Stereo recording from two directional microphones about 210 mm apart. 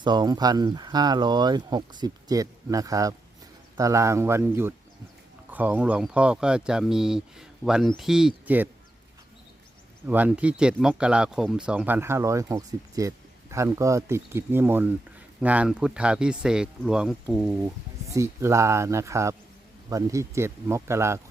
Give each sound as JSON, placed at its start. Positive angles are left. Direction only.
{"t": 0.0, "sound": "speech", "side_deg": -20}
{"t": 10.1, "sound": "speech", "side_deg": -5}
{"t": 18.0, "sound": "speech", "side_deg": -15}